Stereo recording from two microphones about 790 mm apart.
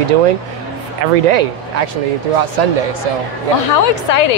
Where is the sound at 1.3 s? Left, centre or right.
Right.